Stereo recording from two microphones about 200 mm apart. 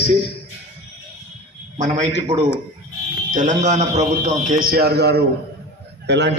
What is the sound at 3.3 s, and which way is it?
A man's voice, 40° right (ahead or behind).